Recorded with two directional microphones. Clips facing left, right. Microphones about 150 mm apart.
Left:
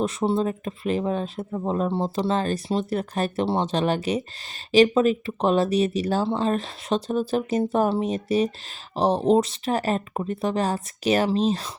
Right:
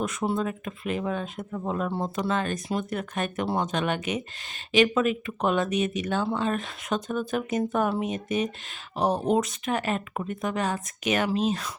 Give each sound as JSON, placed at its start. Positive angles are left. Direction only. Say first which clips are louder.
{"t": 0.0, "sound": "speech", "louder": "left 4 dB", "side_deg": 30}